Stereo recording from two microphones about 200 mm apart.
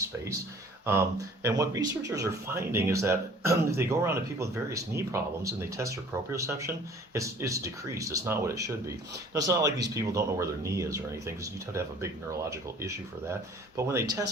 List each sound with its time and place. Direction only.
0.9 s speech: 15° right (ahead or behind)
13.7 s speech: 15° right (ahead or behind)